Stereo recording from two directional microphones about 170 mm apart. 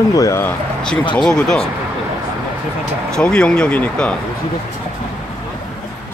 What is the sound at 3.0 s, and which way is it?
Speech, 5° left (ahead or behind).